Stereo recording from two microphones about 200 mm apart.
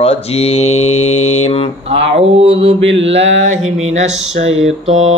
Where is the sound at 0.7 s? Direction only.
90° left.